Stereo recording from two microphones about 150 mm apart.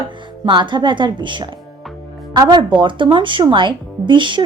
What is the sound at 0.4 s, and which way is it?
Speech, 30° right (ahead or behind).